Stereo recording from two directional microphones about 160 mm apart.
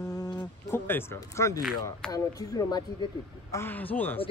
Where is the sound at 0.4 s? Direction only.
15° left (ahead or behind).